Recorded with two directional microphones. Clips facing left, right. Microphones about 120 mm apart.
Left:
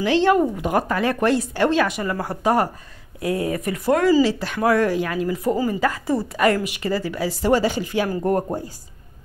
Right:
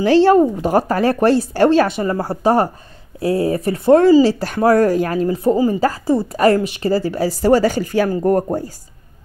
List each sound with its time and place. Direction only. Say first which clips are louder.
0.0 s speech: right 6 dB; 35° right (ahead or behind)